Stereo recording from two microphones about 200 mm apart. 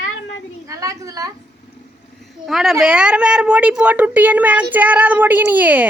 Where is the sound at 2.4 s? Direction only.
Centre (ahead or behind).